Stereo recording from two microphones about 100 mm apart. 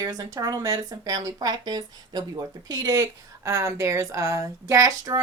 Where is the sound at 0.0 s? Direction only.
35° right (ahead or behind).